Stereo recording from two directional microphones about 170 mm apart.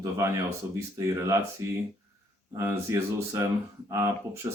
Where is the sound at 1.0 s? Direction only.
15° right (ahead or behind).